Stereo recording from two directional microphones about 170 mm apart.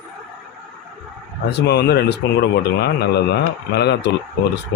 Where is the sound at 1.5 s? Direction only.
80° left.